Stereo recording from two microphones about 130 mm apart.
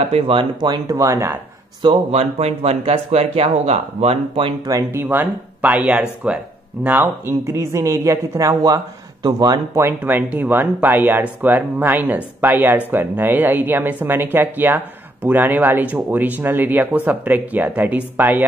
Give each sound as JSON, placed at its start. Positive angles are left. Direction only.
{"t": 0.0, "sound": "speech", "side_deg": -50}
{"t": 1.8, "sound": "speech", "side_deg": -40}
{"t": 2.1, "sound": "speech", "side_deg": -55}
{"t": 4.9, "sound": "speech", "side_deg": -15}
{"t": 9.8, "sound": "speech", "side_deg": -15}